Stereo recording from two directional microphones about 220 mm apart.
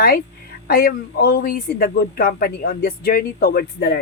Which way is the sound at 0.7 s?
45° left (ahead or behind).